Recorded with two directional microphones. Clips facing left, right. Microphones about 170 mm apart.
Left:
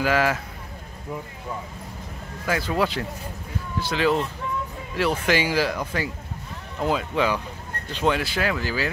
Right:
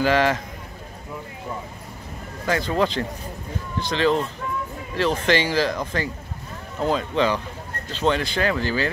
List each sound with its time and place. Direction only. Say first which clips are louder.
0.0 s speech: right 2 dB; 5° left (ahead or behind)
2.4 s speech: right 2 dB; 5° left (ahead or behind)